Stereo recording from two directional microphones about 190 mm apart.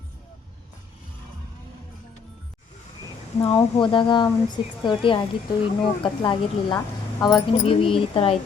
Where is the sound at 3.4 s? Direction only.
25° left (ahead or behind).